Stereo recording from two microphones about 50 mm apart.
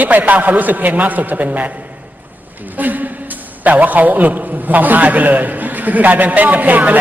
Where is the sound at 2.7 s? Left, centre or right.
Right.